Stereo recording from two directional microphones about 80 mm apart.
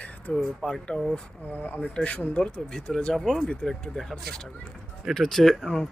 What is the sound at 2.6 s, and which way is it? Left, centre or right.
Speech, centre.